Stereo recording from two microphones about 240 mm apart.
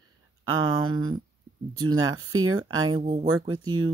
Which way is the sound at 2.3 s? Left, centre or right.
Right.